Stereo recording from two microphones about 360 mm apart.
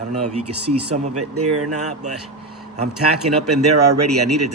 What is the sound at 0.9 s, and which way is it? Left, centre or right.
Speech, centre.